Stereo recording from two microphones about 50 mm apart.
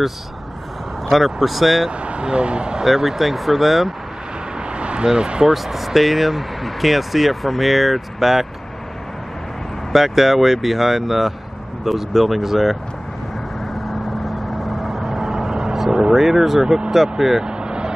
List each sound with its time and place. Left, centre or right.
1.1 s speech: centre
1.9 s speech: right
2.8 s speech: centre
4.7 s speech: right
5.5 s speech: centre
9.9 s speech: centre
13.7 s vehicle: centre
17.5 s vehicle: centre